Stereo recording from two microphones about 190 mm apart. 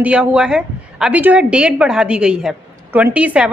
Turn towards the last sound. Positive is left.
turn(degrees=-5)  # may be behind; listen again after turning